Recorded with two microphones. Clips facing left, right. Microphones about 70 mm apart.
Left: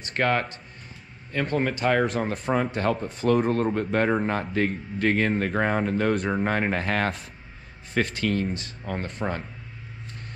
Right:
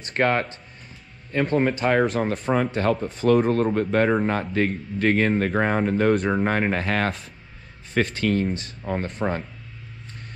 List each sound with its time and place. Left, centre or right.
0.1 s speech: right
2.0 s speech: right
8.1 s speech: right